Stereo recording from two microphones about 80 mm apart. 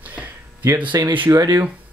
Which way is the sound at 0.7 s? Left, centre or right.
Right.